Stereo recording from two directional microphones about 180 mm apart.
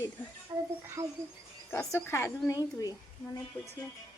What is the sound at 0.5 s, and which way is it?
Speech, 20° right (ahead or behind).